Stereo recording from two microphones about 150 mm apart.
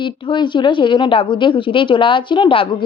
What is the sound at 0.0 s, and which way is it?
Speech, 30° left (ahead or behind).